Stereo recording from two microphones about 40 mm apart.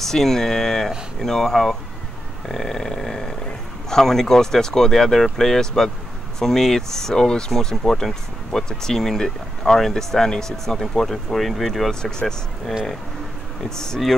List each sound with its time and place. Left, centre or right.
0.0 s speech: centre
2.4 s a sound: centre
3.9 s speech: centre
11.9 s speech: centre